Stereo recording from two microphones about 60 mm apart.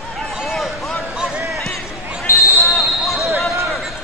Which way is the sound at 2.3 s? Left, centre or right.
Left.